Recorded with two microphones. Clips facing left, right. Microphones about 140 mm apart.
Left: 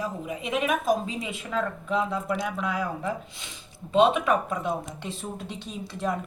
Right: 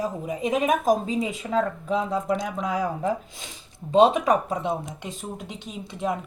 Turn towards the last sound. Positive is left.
turn(degrees=-20)  # may be behind; listen again after turning